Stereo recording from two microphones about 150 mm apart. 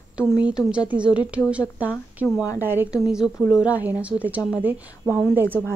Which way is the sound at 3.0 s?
5° right (ahead or behind).